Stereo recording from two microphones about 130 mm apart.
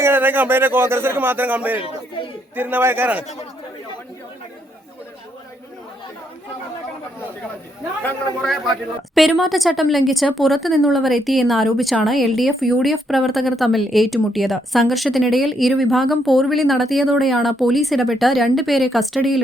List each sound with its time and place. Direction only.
0.0 s speech: 15° right (ahead or behind)
8.0 s speech: 5° left (ahead or behind)